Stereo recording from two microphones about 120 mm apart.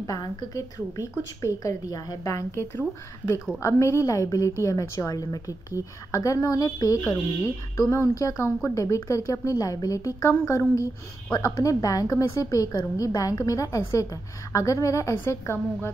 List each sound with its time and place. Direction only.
0.0 s a woman's voice: 35° left (ahead or behind)